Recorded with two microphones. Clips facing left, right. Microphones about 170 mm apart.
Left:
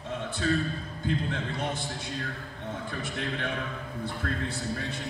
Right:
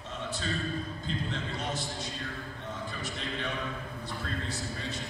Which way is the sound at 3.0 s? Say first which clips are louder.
Left 4 dB; 55° left (ahead or behind).